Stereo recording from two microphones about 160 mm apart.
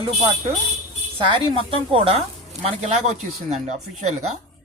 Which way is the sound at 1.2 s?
30° right (ahead or behind).